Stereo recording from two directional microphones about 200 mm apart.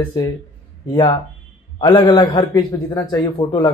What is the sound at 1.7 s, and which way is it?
Speech, 20° left (ahead or behind).